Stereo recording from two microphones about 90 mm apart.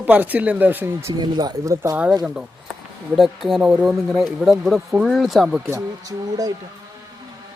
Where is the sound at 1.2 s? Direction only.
50° right (ahead or behind).